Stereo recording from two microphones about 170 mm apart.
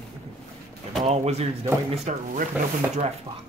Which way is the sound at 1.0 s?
40° right (ahead or behind).